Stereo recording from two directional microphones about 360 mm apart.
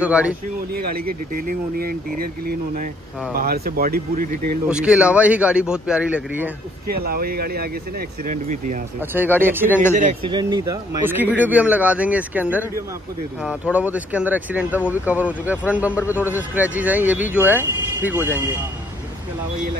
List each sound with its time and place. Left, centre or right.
0.0 s speech: centre
0.7 s speech: right
3.3 s speech: right
4.6 s speech: centre
6.9 s speech: right
9.0 s speech: centre